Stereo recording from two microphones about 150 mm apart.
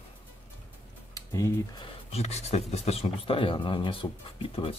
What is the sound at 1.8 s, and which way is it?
Speech, 40° left (ahead or behind).